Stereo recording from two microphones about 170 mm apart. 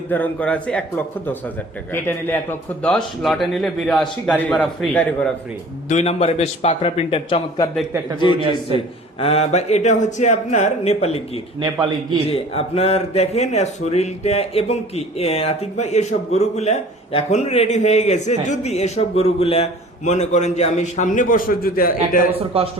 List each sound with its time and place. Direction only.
0.1 s a man's voice: 10° left (ahead or behind)
5.9 s speech: 40° left (ahead or behind)
9.2 s speech: 35° left (ahead or behind)
11.6 s a man's voice: 20° right (ahead or behind)
12.3 s speech: 35° left (ahead or behind); by 22.3 s 55° left (ahead or behind)
22.3 s speech: 35° right (ahead or behind)